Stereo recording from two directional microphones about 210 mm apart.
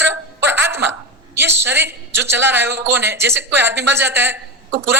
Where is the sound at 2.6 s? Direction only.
50° right (ahead or behind).